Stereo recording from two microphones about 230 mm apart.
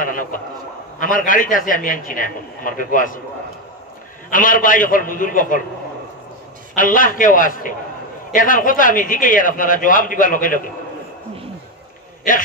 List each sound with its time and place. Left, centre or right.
0.0 s a sound: left
0.9 s a man's voice: left
4.3 s a man's voice: left
6.7 s a man's voice: left